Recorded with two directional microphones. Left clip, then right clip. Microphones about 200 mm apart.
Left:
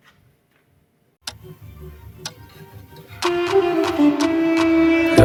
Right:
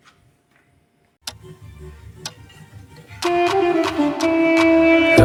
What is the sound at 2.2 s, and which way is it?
Tick-tock, centre (ahead or behind).